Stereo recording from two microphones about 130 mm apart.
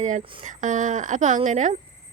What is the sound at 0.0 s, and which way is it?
A woman's voice, 70° right (ahead or behind).